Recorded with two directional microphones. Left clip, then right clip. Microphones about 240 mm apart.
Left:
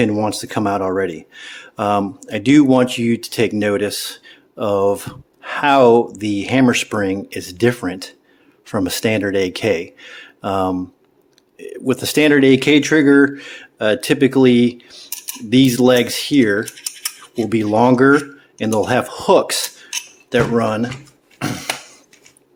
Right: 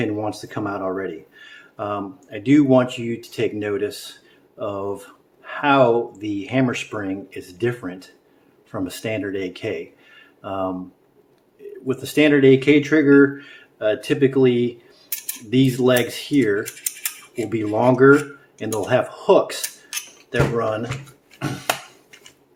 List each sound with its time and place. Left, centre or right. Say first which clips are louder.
0.0 s speech: left 7 dB; left